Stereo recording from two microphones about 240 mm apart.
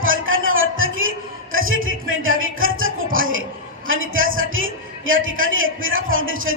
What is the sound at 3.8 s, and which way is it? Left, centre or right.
A man's voice, right.